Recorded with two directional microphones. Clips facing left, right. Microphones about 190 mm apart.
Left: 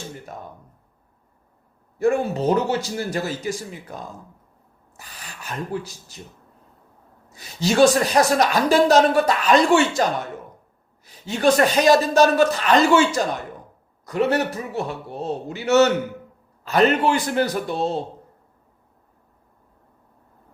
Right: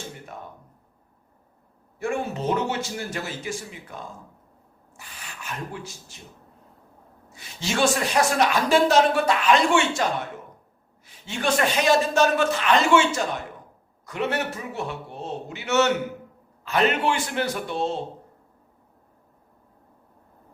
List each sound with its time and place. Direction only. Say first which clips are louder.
2.0 s a man's voice: left 7 dB; 40° left (ahead or behind)
4.9 s speech: left 1 dB; 35° left (ahead or behind)
7.3 s a man's voice: left 8 dB; 40° left (ahead or behind)
11.0 s a man's voice: left 8 dB; 40° left (ahead or behind)